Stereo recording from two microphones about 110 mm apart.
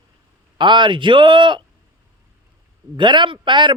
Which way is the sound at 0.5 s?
45° right (ahead or behind).